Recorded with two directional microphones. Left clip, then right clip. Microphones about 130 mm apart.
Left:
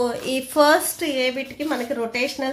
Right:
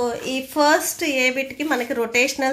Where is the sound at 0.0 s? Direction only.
10° left (ahead or behind).